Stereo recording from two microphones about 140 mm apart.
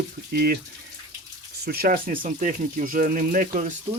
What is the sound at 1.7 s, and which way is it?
Speech, 90° right.